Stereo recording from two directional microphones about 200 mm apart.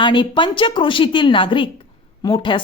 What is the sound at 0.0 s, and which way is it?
A woman's voice, 25° left (ahead or behind).